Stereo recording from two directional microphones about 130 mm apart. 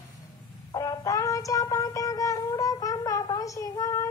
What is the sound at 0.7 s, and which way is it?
Wind instrument, 30° left (ahead or behind).